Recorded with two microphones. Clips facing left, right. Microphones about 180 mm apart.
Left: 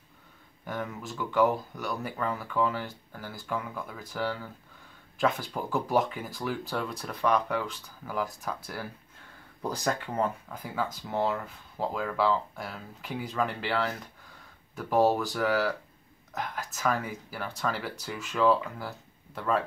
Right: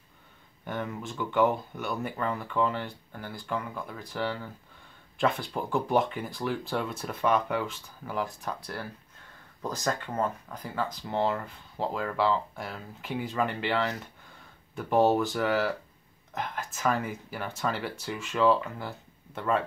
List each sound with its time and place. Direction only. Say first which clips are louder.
0.7 s speech: right 1 dB; centre (ahead or behind)
9.6 s speech: left 1 dB; 15° left (ahead or behind)